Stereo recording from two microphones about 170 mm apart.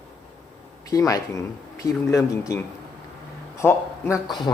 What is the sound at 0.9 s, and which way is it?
A man's voice, 20° left (ahead or behind).